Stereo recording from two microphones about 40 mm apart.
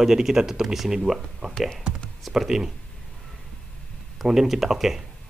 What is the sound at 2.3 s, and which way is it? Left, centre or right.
Speech, centre.